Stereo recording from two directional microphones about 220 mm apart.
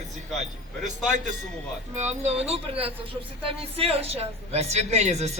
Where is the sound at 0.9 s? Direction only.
35° right (ahead or behind).